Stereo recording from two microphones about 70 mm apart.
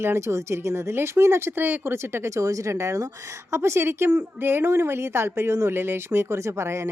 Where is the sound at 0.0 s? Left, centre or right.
Right.